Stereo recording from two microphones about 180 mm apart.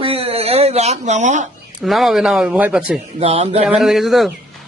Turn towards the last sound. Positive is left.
turn(degrees=0)  # may be behind; listen again after turning